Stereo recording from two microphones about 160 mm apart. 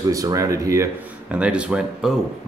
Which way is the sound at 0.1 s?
20° right (ahead or behind).